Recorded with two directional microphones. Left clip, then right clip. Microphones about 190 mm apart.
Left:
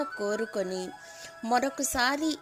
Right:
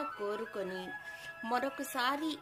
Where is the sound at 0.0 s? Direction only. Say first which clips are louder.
Left 7 dB; 40° left (ahead or behind).